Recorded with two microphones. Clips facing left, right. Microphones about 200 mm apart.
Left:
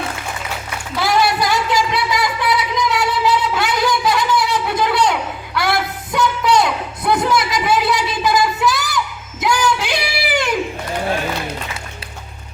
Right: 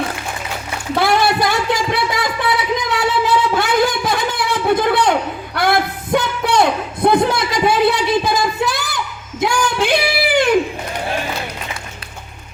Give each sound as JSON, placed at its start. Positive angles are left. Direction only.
{"t": 0.9, "sound": "music", "side_deg": -55}
{"t": 5.5, "sound": "a sound", "side_deg": -55}
{"t": 9.7, "sound": "singing", "side_deg": -55}